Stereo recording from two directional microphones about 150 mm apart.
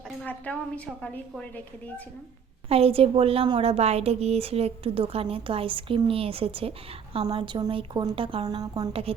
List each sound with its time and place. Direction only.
0.5 s a woman's voice: 10° left (ahead or behind)
2.6 s a woman's voice: 40° right (ahead or behind); by 8.9 s 25° right (ahead or behind)
8.9 s a woman's voice: 40° right (ahead or behind)